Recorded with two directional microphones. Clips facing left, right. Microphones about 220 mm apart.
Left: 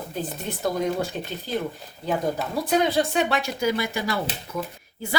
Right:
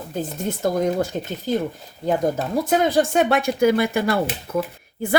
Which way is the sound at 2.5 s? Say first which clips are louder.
Right 3 dB; 45° right (ahead or behind).